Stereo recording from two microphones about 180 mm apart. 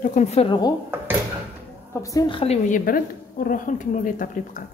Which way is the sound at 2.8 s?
50° left (ahead or behind).